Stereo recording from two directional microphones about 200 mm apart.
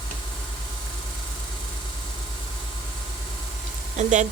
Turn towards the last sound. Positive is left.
turn(degrees=-35)  # may be behind; listen again after turning